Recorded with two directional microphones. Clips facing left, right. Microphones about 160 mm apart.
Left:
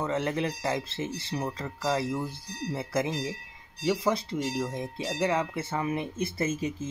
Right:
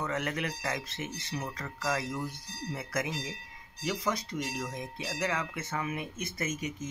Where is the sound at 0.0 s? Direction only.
30° left (ahead or behind).